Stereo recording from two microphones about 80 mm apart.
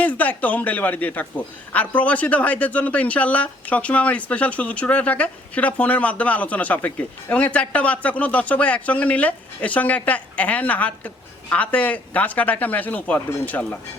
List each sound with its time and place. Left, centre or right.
0.0 s speech: centre